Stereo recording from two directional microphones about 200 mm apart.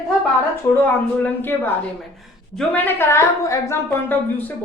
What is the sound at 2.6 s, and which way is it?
A woman's voice, 10° left (ahead or behind).